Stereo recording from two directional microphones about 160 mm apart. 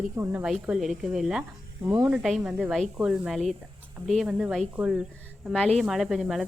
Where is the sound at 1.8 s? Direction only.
15° right (ahead or behind).